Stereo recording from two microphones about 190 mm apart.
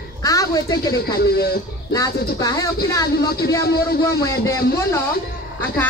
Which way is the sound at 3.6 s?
55° left (ahead or behind).